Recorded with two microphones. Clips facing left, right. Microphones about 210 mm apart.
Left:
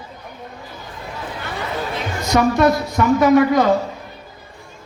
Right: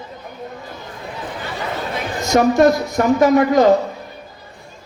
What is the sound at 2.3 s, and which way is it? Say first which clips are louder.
A man's voice: right 2 dB; 45° right (ahead or behind).